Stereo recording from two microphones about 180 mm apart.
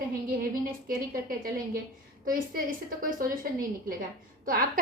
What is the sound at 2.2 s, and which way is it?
A woman's voice, 50° right (ahead or behind).